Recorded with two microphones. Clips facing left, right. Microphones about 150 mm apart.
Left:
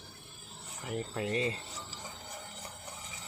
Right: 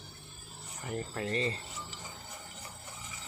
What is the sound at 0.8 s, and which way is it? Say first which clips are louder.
Speech: left 1 dB; 5° left (ahead or behind).